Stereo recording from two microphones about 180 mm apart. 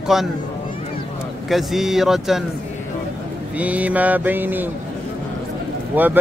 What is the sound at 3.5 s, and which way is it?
Mantra, 10° right (ahead or behind).